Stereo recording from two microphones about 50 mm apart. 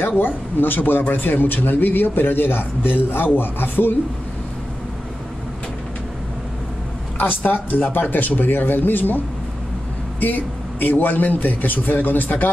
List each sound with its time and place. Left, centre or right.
0.2 s a man's voice: left
7.2 s a man's voice: left
10.2 s a man's voice: left